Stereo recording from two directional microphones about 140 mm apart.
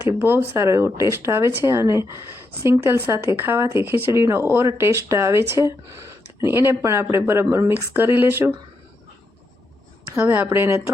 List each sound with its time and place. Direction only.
0.0 s speech: 15° right (ahead or behind)
10.2 s speech: 10° right (ahead or behind)